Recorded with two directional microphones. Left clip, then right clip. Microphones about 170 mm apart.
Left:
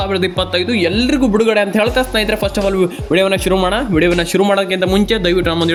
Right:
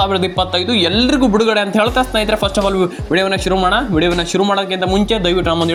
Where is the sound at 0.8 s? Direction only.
40° left (ahead or behind).